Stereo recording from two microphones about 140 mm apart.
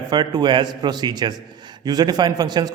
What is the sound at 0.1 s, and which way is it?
A man's voice, 30° right (ahead or behind).